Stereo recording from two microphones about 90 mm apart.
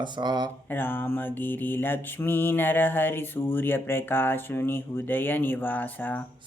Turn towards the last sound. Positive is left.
turn(degrees=20)  # may be behind; listen again after turning